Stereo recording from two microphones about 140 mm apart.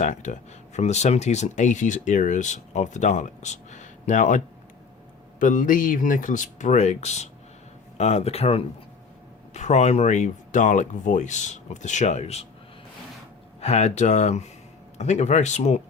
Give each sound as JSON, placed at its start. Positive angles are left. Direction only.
{"t": 0.0, "sound": "speech", "side_deg": 60}
{"t": 13.6, "sound": "speech", "side_deg": 50}